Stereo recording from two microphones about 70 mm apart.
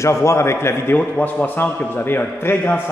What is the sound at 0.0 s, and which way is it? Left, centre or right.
A man's voice, left.